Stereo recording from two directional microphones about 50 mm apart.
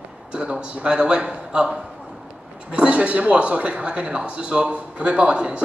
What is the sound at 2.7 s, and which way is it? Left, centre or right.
Speech, right.